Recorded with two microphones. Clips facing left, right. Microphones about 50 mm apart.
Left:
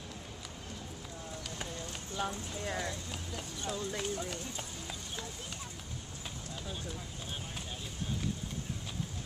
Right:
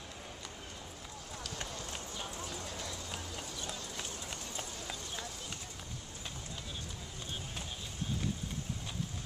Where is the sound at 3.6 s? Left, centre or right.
Left.